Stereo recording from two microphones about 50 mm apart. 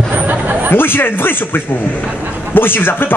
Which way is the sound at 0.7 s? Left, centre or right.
Left.